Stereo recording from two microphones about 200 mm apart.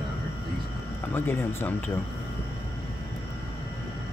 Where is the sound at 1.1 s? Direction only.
10° left (ahead or behind).